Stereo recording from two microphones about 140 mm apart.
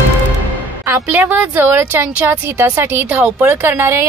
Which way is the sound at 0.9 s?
15° right (ahead or behind).